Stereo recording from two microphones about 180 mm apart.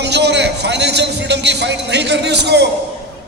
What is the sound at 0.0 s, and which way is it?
A man's voice, 70° right (ahead or behind).